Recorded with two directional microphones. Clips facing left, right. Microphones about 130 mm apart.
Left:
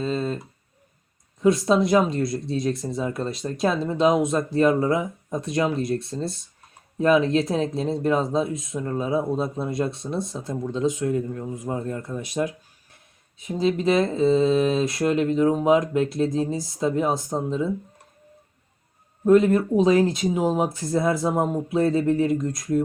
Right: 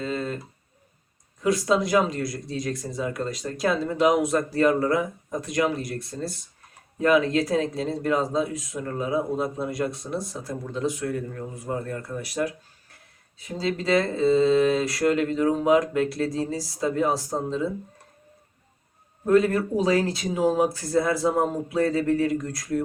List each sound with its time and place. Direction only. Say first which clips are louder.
0.0 s a sound: left 3 dB; 25° left (ahead or behind)
1.4 s speech: left 3 dB; 25° left (ahead or behind)
19.2 s speech: left 3 dB; 20° left (ahead or behind)